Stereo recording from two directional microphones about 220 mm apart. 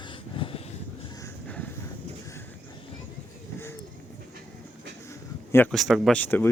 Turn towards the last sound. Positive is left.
turn(degrees=10)  # may be behind; listen again after turning